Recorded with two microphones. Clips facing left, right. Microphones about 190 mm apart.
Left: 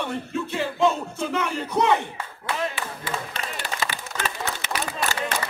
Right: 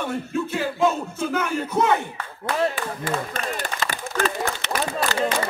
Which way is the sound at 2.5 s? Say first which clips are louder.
Right 5 dB; 45° right (ahead or behind).